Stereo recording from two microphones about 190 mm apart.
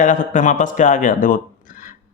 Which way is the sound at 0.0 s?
40° left (ahead or behind).